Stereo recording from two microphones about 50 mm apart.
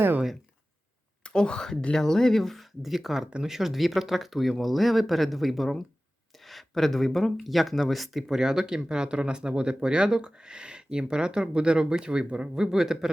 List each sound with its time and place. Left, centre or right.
1.2 s speech: centre